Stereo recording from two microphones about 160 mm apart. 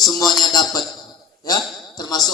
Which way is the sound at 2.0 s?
25° left (ahead or behind).